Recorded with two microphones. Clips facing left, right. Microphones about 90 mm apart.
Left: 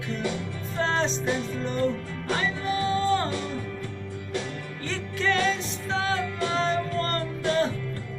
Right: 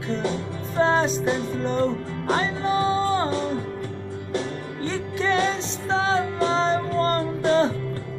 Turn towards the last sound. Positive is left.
turn(degrees=-25)  # may be behind; listen again after turning